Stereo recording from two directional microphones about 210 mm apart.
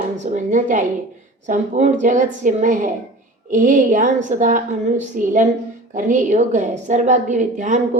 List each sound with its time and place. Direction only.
0.3 s a woman's voice: 35° right (ahead or behind)